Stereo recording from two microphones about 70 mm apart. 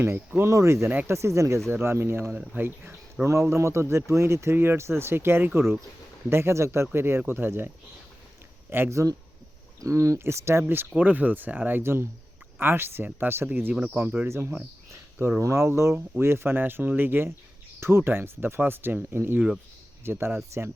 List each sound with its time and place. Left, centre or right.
0.0 s speech: right
3.2 s speech: right
8.7 s speech: right
9.8 s speech: right
11.8 s speech: right
14.3 s speech: right